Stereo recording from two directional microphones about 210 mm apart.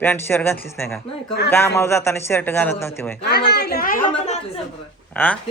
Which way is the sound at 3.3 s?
50° left (ahead or behind).